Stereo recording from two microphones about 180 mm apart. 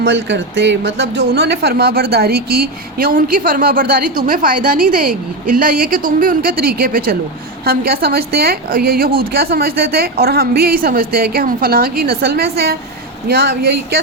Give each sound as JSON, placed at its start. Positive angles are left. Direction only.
{"t": 0.0, "sound": "a woman's voice", "side_deg": -75}